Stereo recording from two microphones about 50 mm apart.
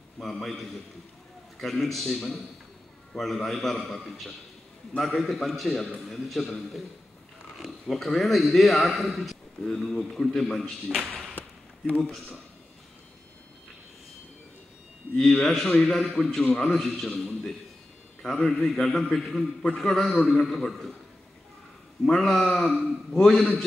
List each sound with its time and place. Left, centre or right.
0.2 s a man's voice: centre
7.9 s a man's voice: centre
10.6 s a man's voice: centre
11.3 s a sound: left
15.1 s a man's voice: centre
16.7 s a man's voice: centre
18.2 s a man's voice: centre
22.0 s a man's voice: centre